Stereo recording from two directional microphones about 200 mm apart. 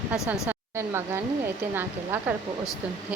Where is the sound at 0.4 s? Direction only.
10° right (ahead or behind).